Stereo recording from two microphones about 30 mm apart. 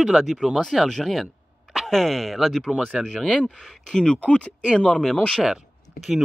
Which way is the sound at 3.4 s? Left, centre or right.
Left.